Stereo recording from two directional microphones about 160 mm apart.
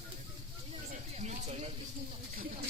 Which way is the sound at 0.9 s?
45° right (ahead or behind).